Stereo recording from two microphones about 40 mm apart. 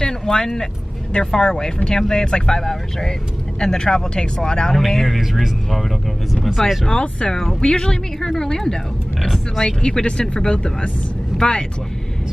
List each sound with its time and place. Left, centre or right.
0.0 s vehicle: centre
1.1 s speech: centre
6.9 s speech: left